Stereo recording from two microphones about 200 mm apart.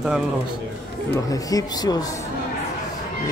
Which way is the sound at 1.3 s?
20° left (ahead or behind).